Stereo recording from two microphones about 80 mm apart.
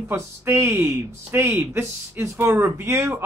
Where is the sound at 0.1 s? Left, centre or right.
Right.